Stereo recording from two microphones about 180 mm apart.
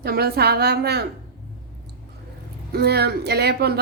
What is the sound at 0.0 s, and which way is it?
Speech, 60° right (ahead or behind).